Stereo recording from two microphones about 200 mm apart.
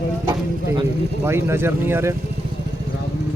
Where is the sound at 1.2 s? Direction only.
10° right (ahead or behind).